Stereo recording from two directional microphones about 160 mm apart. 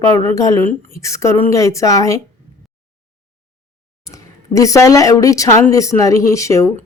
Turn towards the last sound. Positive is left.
turn(degrees=20)  # may be behind; listen again after turning